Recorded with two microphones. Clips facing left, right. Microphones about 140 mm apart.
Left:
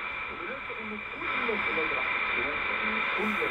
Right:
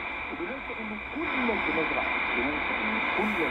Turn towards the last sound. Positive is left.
turn(degrees=-30)  # may be behind; listen again after turning